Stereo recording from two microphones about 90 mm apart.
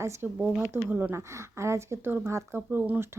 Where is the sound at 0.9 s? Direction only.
20° right (ahead or behind).